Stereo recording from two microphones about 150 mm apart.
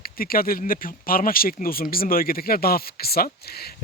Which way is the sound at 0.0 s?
75° left (ahead or behind).